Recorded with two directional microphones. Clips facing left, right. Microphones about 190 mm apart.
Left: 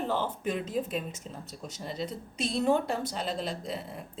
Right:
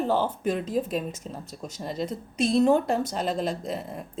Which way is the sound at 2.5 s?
45° right (ahead or behind).